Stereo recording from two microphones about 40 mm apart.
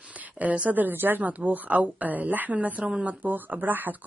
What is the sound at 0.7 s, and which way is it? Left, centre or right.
Speech, right.